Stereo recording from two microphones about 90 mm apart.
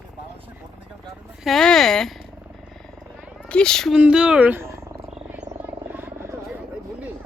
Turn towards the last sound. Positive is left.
turn(degrees=-25)  # may be behind; listen again after turning